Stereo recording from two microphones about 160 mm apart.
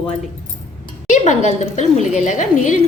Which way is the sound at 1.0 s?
50° left (ahead or behind).